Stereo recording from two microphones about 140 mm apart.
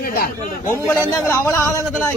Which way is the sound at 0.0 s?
90° left.